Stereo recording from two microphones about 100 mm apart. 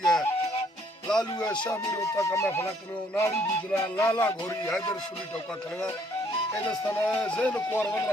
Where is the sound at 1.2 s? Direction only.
45° left (ahead or behind).